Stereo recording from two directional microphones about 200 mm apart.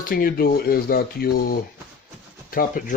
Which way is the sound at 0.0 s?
45° left (ahead or behind).